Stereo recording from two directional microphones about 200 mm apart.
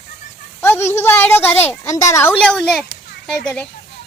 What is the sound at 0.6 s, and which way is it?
A child's voice, 10° left (ahead or behind).